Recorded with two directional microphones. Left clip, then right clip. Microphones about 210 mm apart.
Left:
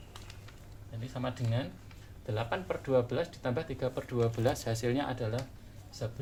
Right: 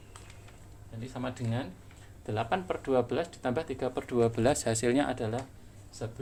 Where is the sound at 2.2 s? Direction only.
45° right (ahead or behind).